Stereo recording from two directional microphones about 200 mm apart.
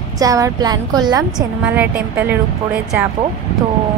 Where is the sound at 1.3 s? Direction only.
5° right (ahead or behind).